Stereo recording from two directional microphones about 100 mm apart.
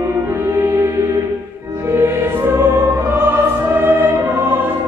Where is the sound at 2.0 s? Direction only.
20° right (ahead or behind).